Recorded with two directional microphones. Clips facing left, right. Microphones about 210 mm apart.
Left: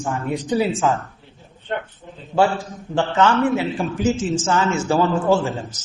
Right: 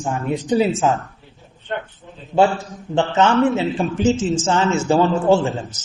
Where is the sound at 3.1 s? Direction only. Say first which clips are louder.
Right 1 dB; 25° right (ahead or behind).